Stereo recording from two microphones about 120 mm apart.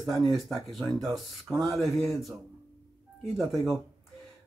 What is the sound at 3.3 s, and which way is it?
Speech, centre (ahead or behind).